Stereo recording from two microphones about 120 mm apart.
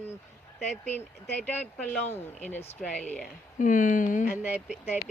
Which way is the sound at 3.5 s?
90° left.